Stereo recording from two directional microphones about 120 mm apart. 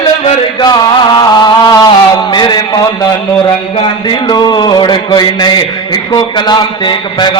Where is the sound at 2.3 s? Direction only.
35° left (ahead or behind).